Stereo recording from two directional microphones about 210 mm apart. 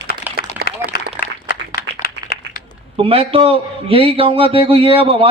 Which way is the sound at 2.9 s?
25° right (ahead or behind).